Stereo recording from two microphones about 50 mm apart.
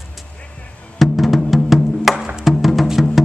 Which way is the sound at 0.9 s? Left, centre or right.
Centre.